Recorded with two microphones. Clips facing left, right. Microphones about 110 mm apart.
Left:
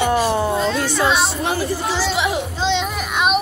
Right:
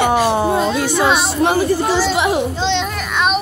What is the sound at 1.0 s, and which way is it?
A child's voice, 60° right (ahead or behind).